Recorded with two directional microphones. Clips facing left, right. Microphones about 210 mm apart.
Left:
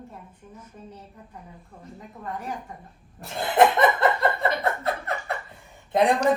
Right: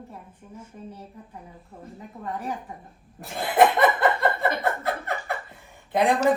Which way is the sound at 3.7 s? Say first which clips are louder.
Even; centre (ahead or behind).